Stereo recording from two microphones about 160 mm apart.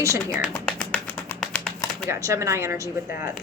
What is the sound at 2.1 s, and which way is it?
Speech, 15° right (ahead or behind).